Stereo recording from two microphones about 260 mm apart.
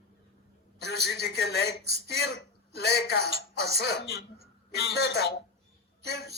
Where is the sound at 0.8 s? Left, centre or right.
Left.